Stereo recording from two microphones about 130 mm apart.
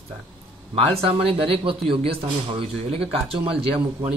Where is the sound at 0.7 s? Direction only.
50° right (ahead or behind).